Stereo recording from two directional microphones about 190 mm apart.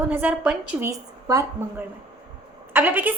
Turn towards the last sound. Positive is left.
turn(degrees=-10)  # may be behind; listen again after turning